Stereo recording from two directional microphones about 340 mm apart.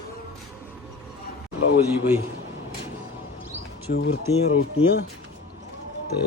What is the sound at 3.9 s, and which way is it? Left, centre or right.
Speech, left.